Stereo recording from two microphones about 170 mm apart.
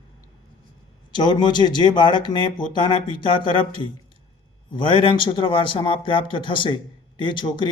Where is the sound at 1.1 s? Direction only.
25° left (ahead or behind).